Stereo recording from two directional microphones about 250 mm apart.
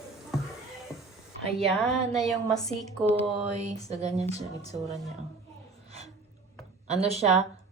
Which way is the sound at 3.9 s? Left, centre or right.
Right.